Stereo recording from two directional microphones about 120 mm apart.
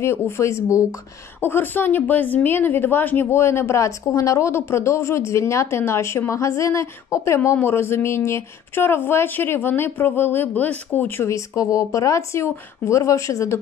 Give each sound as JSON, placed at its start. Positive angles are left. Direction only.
{"t": 0.0, "sound": "speech", "side_deg": 20}